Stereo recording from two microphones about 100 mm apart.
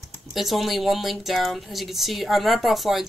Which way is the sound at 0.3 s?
Centre (ahead or behind).